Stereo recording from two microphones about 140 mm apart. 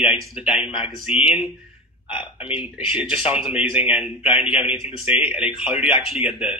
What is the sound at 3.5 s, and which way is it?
A man's voice, 10° right (ahead or behind).